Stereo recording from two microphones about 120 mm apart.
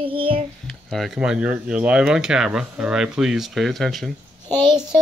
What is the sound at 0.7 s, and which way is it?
Speech, centre (ahead or behind).